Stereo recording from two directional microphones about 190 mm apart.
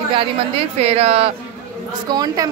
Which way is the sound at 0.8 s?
30° right (ahead or behind).